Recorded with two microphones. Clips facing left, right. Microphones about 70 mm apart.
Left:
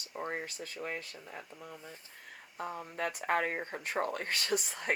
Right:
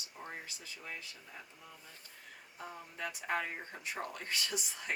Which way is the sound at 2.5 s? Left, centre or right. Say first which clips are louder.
Left 8 dB; left.